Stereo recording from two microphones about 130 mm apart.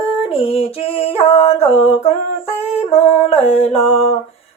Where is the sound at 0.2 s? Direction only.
50° left (ahead or behind).